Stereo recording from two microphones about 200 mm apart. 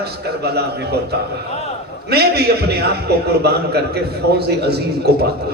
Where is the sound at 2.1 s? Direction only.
55° right (ahead or behind).